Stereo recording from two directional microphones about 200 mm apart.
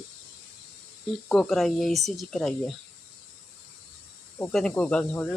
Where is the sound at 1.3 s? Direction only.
Centre (ahead or behind).